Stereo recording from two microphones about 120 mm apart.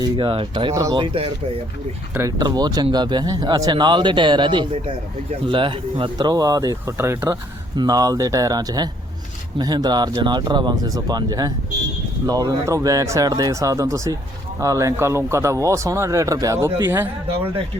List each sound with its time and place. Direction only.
0.0 s speech: 45° right (ahead or behind)
0.7 s a man's voice: 30° right (ahead or behind)
0.9 s speech: 45° right (ahead or behind)
2.4 s a man's voice: 35° right (ahead or behind)
6.9 s speech: 20° right (ahead or behind)
7.8 s a man's voice: 30° right (ahead or behind)